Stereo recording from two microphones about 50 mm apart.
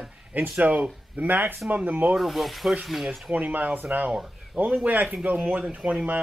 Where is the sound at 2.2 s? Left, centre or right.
Centre.